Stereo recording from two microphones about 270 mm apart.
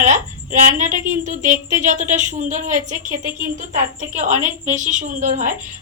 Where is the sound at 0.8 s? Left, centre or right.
Right.